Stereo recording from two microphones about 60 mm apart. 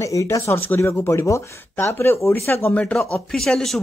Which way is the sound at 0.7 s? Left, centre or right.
Left.